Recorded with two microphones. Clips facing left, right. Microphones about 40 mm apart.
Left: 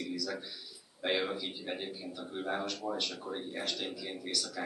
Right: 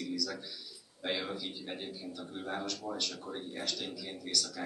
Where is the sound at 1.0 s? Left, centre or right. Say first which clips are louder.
Left 3 dB; centre.